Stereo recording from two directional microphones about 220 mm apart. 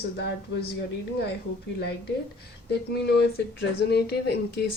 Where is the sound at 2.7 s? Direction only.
50° left (ahead or behind).